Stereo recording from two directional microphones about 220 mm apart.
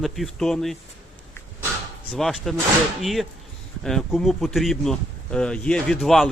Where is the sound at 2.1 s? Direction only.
Centre (ahead or behind).